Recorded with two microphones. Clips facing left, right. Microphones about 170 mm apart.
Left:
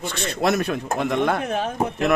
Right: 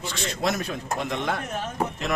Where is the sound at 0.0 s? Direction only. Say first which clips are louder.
Left 4 dB; 55° left (ahead or behind).